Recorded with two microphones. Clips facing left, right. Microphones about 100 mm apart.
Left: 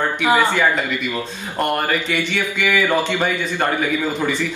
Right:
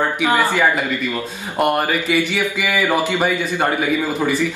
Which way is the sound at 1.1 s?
10° right (ahead or behind).